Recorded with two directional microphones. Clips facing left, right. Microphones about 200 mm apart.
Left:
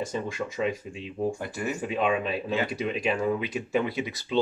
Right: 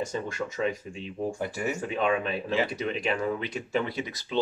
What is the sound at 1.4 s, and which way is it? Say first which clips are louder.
Speech: right 2 dB; 10° right (ahead or behind).